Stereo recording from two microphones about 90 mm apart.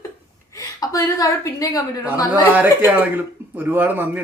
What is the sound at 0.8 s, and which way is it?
A woman's voice, 40° left (ahead or behind).